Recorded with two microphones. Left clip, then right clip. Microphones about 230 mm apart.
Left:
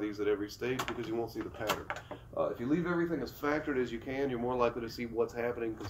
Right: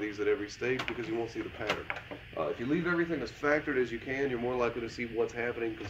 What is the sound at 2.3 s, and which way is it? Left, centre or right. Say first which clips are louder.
Speech: even; centre.